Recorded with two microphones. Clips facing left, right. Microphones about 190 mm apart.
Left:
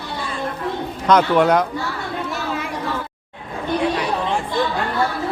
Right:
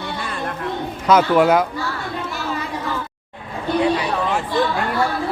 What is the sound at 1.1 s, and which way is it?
Speech, 5° right (ahead or behind).